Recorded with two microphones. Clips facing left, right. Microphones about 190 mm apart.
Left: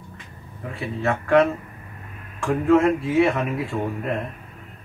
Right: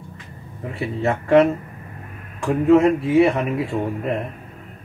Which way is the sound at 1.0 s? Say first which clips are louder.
Right 3 dB; 20° right (ahead or behind).